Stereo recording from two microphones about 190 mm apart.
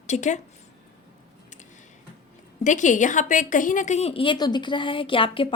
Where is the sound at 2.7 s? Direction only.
40° left (ahead or behind).